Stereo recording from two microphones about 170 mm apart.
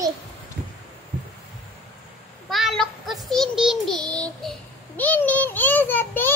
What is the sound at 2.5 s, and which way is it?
Child singing, centre (ahead or behind).